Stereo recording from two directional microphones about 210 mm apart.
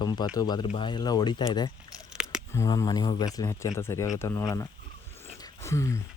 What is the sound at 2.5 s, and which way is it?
Speech, 15° left (ahead or behind).